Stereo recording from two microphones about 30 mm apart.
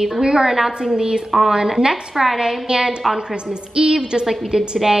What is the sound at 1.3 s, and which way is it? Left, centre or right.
A woman's voice, centre.